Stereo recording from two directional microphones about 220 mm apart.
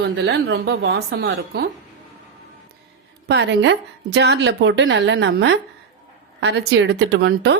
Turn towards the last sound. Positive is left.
turn(degrees=-55)  # may be behind; listen again after turning